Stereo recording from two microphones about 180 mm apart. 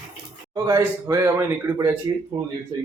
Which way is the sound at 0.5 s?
20° right (ahead or behind).